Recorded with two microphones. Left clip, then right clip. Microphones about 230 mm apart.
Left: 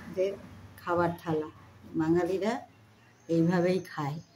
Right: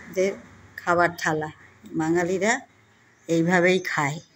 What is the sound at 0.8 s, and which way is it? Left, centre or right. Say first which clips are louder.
Speech: right 8 dB; right.